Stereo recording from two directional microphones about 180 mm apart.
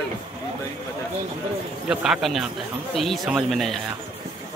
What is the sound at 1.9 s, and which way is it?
Speech, centre (ahead or behind).